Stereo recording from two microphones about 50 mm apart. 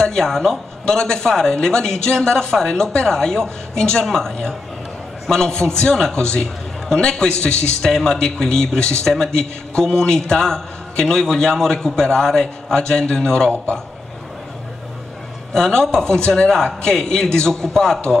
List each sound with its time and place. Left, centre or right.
0.0 s a man's voice: centre
15.5 s a man's voice: centre